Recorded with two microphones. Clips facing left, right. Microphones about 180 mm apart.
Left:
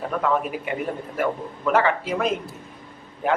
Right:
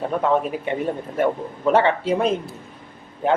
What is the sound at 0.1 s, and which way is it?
A man's voice, 30° right (ahead or behind).